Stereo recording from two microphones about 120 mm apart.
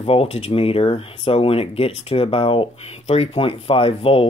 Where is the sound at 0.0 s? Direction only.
55° left (ahead or behind).